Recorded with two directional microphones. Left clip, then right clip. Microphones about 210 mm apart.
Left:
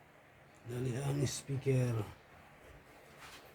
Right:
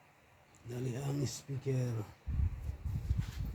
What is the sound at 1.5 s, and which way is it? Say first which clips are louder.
Speech: left 3 dB; 5° right (ahead or behind).